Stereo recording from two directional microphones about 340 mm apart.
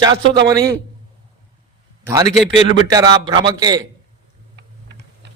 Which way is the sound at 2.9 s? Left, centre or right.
Centre.